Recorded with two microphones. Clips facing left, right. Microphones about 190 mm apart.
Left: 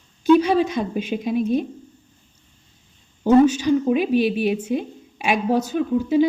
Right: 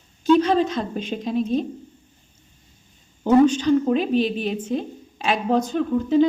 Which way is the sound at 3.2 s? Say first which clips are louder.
Left 1 dB; 10° left (ahead or behind).